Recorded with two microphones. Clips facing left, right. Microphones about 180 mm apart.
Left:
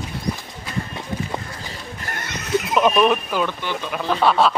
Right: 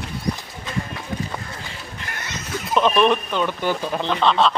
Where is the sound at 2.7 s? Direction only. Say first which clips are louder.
Even; 5° left (ahead or behind).